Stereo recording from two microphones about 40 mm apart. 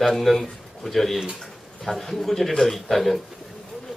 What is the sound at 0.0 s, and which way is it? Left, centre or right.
A man's voice, centre.